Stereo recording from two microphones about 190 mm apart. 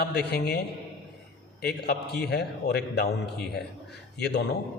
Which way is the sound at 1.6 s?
60° left (ahead or behind).